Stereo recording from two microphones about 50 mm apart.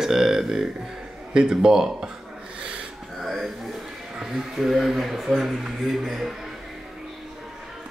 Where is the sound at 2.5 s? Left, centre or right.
Right.